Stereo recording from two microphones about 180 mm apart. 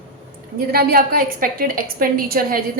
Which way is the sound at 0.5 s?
55° right (ahead or behind).